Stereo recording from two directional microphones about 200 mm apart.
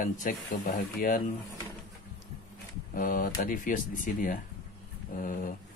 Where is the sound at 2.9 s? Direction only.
45° left (ahead or behind).